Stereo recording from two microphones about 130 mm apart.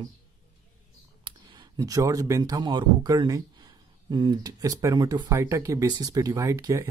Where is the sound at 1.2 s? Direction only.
35° right (ahead or behind).